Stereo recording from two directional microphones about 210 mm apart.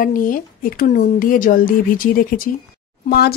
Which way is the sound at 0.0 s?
40° left (ahead or behind).